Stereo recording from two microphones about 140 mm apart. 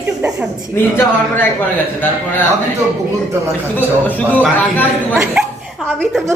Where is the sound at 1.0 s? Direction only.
15° left (ahead or behind).